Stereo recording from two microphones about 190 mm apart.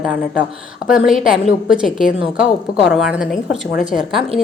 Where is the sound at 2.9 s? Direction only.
Centre (ahead or behind).